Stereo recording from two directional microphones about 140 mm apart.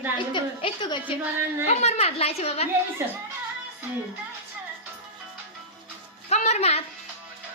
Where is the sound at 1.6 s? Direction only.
50° left (ahead or behind).